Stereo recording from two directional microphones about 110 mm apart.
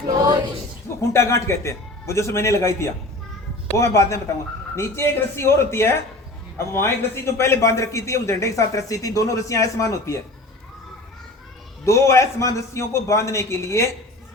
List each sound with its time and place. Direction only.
0.1 s a sound: 35° right (ahead or behind)
1.1 s a man's voice: 25° left (ahead or behind)
11.9 s a man's voice: 25° left (ahead or behind)